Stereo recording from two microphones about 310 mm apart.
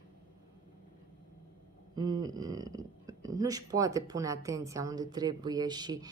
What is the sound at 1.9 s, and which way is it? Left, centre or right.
A woman's voice, centre.